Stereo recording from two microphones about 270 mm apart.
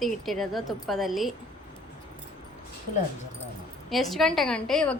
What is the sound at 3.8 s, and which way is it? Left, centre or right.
A woman's voice, centre.